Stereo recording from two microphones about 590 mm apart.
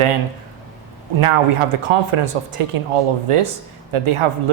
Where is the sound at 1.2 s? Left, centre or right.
Right.